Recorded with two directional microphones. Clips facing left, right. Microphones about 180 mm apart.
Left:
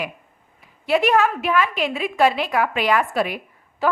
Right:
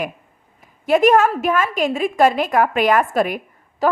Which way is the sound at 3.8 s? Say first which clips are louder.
Right 3 dB; 40° right (ahead or behind).